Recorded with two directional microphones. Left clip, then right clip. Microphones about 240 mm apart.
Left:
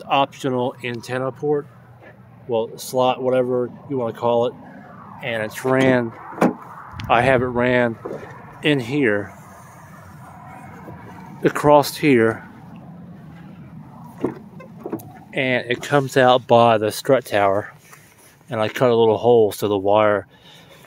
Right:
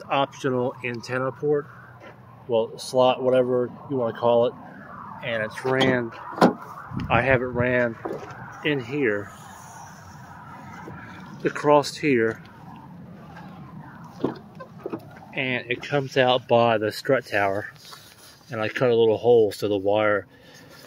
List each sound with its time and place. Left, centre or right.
0.1 s speech: centre
5.2 s speech: left
11.4 s speech: left
15.9 s speech: left
16.5 s speech: left